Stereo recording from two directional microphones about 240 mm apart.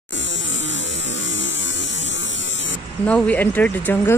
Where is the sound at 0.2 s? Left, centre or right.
Left.